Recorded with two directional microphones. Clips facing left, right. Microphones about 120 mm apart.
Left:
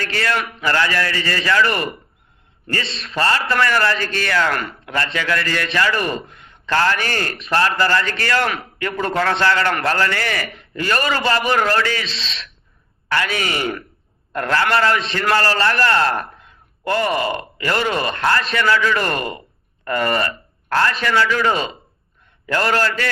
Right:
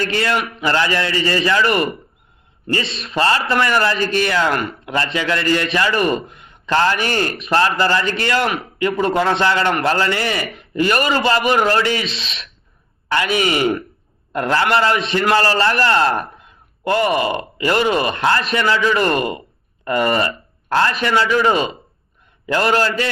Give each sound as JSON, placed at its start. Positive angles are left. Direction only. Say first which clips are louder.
{"t": 0.0, "sound": "a man's voice", "louder": "right 3 dB", "side_deg": -25}